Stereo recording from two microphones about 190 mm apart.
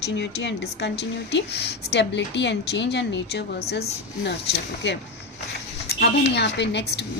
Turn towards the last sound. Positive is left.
turn(degrees=65)  # may be behind; listen again after turning